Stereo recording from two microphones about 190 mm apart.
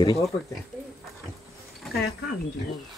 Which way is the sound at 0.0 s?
20° left (ahead or behind).